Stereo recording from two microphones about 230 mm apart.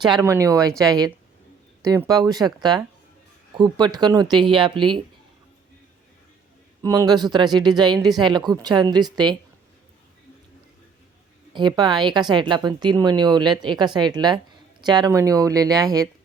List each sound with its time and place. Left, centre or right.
0.0 s a woman's voice: centre
6.8 s a woman's voice: centre
11.5 s a woman's voice: centre